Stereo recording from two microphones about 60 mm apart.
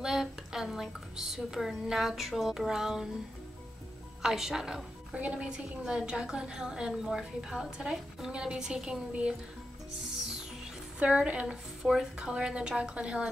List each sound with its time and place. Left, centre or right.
0.0 s a woman's voice: centre
4.2 s a woman's voice: centre
5.1 s a woman's voice: right
11.0 s a woman's voice: centre
11.8 s a woman's voice: centre